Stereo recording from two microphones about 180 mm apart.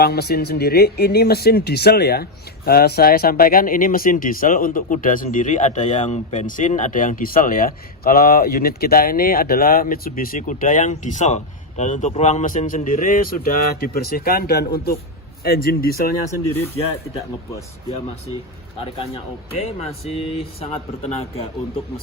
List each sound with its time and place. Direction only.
0.0 s speech: 60° left (ahead or behind)
18.9 s speech: 35° left (ahead or behind)